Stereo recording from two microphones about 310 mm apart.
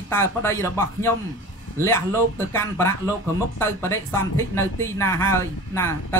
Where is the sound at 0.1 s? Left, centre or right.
Centre.